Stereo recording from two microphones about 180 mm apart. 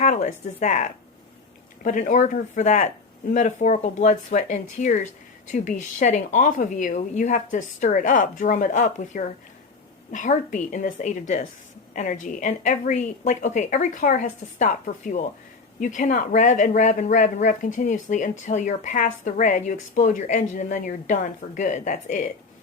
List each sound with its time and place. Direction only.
0.0 s speech: 40° left (ahead or behind)